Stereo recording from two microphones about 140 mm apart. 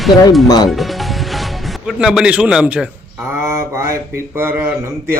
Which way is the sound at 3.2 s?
20° right (ahead or behind).